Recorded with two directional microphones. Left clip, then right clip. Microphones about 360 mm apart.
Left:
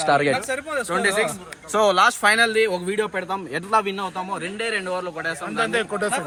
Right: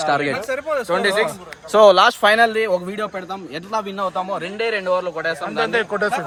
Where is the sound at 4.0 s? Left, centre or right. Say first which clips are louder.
Right 5 dB; right.